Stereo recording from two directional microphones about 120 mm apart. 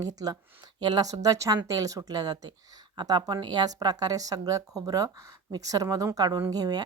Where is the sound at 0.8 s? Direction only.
35° right (ahead or behind).